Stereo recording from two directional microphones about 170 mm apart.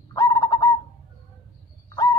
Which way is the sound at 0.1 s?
20° left (ahead or behind).